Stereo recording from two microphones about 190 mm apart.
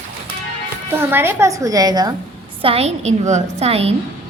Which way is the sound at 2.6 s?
30° right (ahead or behind).